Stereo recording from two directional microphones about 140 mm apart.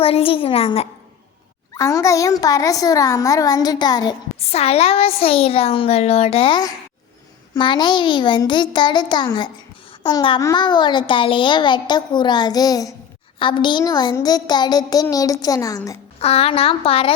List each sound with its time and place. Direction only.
0.0 s speech: 45° left (ahead or behind)
1.7 s speech: 20° left (ahead or behind)
4.5 s a woman's voice: 45° left (ahead or behind); by 16.0 s 25° left (ahead or behind)
16.2 s speech: 45° left (ahead or behind)